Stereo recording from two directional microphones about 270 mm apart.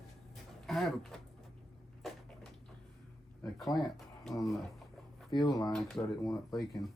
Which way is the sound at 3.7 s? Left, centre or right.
Centre.